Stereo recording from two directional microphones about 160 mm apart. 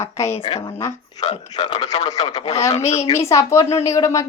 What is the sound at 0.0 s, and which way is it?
Speech, 15° left (ahead or behind).